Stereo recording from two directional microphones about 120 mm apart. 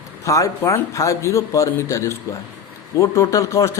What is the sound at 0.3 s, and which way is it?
Speech, 25° left (ahead or behind).